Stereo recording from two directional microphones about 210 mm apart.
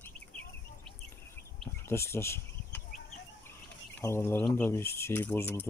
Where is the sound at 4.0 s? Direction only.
10° left (ahead or behind).